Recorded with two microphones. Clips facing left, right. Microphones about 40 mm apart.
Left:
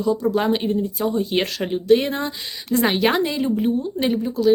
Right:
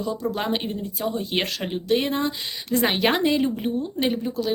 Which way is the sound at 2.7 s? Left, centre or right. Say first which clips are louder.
Left 3 dB; centre.